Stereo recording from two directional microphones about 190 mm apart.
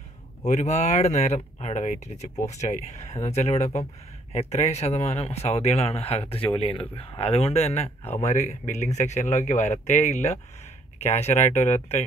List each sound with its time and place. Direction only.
0.5 s speech: 35° left (ahead or behind)